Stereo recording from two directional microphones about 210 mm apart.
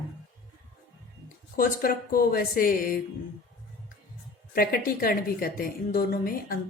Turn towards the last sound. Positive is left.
turn(degrees=45)  # may be behind; listen again after turning